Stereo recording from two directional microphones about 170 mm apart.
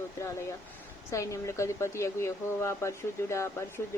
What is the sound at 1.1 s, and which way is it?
Speech, 15° left (ahead or behind).